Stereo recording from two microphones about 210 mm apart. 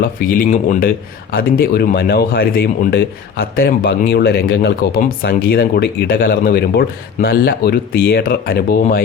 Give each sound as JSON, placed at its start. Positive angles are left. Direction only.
{"t": 0.0, "sound": "speech", "side_deg": 40}